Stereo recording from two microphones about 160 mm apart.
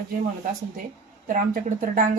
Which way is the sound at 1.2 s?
55° right (ahead or behind).